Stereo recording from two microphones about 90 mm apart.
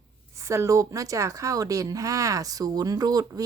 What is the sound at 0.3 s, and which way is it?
Speech, 35° right (ahead or behind).